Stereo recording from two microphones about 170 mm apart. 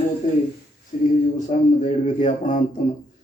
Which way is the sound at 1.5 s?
45° left (ahead or behind).